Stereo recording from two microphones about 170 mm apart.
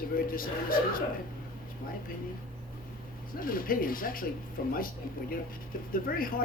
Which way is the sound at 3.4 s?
55° left (ahead or behind).